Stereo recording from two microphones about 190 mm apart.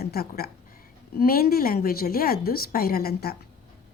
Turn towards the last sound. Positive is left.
turn(degrees=55)  # may be behind; listen again after turning